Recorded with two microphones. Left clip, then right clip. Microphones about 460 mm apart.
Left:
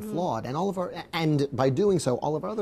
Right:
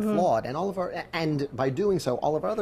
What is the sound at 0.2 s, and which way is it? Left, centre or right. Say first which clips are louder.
Speech: right 2 dB; left.